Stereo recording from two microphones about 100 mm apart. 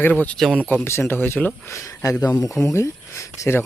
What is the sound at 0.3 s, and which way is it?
Speech, centre (ahead or behind).